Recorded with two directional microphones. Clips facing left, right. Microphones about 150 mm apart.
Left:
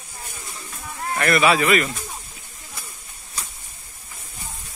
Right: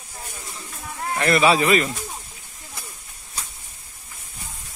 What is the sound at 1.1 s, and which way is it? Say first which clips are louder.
Speech: right 1 dB; 20° right (ahead or behind).